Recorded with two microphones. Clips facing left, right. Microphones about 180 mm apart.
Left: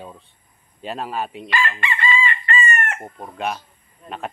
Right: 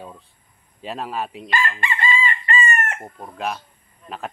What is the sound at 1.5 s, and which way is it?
Chicken, 40° right (ahead or behind).